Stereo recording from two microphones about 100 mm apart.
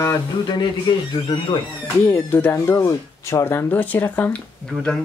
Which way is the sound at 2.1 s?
20° left (ahead or behind).